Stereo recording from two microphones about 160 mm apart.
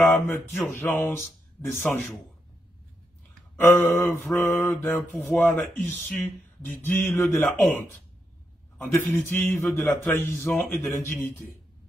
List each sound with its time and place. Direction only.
0.0 s mantra: 15° left (ahead or behind)
3.5 s mantra: 15° left (ahead or behind)
8.7 s a man's voice: 15° left (ahead or behind)
9.2 s mantra: 15° left (ahead or behind)
9.7 s speech: centre (ahead or behind)
10.0 s mantra: 15° left (ahead or behind)